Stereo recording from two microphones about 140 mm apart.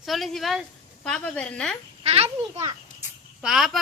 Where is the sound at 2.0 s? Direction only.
45° right (ahead or behind).